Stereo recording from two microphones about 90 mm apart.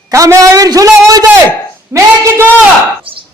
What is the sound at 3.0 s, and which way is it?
Chop, 75° right (ahead or behind).